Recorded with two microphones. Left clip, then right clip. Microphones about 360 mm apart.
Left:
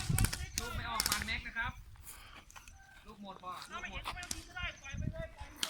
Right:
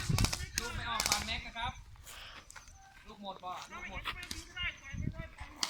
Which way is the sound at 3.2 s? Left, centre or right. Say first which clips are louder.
Right 3 dB; centre.